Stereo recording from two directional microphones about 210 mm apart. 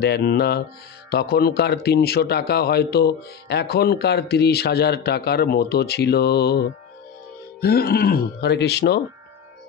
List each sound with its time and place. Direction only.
0.0 s a man's voice: 50° left (ahead or behind)
7.6 s a man's voice: 45° left (ahead or behind)